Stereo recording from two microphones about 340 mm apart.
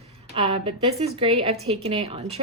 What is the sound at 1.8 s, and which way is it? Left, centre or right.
Speech, centre.